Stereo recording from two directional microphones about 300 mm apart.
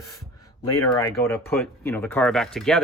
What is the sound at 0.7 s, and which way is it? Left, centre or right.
Speech, centre.